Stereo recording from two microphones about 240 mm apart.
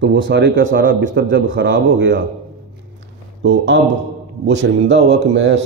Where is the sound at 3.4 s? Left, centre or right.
Right.